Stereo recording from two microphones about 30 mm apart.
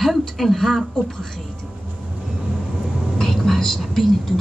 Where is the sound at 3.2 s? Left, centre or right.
Centre.